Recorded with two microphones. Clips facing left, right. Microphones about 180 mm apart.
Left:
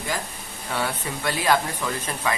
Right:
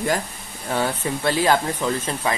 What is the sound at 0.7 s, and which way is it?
Speech, 30° right (ahead or behind).